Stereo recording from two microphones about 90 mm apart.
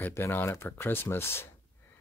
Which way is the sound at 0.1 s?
30° left (ahead or behind).